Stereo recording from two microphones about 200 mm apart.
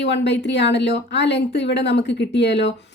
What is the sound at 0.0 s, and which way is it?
Speech, 60° left (ahead or behind).